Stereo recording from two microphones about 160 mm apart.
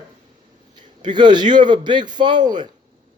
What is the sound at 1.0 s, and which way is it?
Speech, 30° right (ahead or behind).